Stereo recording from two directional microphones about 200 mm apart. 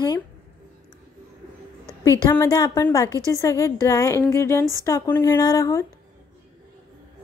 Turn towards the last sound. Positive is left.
turn(degrees=15)  # may be behind; listen again after turning